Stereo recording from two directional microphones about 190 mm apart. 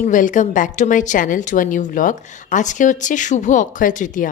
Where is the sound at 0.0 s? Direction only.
45° left (ahead or behind).